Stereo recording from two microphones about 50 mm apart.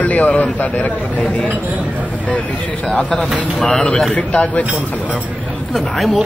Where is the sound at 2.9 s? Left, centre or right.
Left.